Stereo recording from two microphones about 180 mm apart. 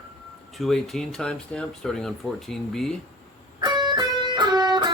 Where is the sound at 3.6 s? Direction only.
25° right (ahead or behind).